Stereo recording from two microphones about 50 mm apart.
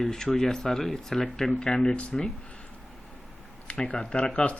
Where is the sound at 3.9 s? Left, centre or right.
Centre.